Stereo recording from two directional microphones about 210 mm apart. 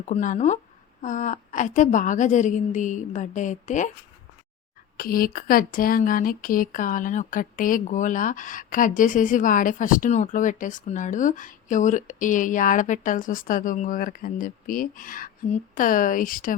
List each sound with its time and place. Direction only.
0.1 s speech: 35° left (ahead or behind)
4.9 s speech: 45° left (ahead or behind)